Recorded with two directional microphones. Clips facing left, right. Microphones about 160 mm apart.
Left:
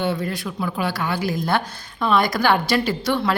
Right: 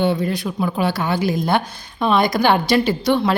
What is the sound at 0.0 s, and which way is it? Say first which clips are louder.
Speech: right 5 dB; 20° right (ahead or behind).